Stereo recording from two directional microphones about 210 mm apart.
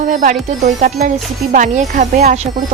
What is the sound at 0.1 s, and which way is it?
Speech, 40° right (ahead or behind).